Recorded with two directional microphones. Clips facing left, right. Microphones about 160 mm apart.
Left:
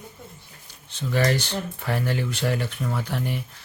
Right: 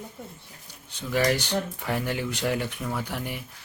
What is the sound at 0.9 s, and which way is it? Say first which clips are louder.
Speech: left 1 dB; 15° right (ahead or behind).